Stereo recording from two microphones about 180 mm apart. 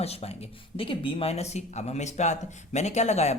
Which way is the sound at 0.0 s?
35° left (ahead or behind).